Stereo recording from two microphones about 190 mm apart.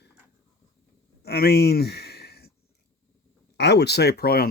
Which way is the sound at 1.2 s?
55° left (ahead or behind).